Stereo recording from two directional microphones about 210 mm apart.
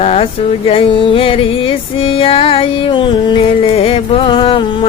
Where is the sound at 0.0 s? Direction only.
30° left (ahead or behind).